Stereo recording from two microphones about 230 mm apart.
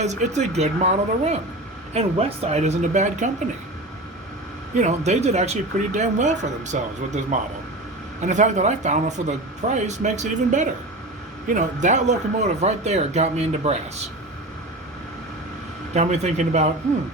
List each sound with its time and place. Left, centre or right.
0.0 s speech: right
4.7 s speech: right
16.0 s speech: right